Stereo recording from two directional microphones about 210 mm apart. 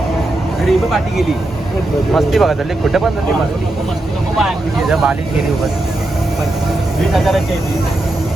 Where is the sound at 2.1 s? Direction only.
Centre (ahead or behind).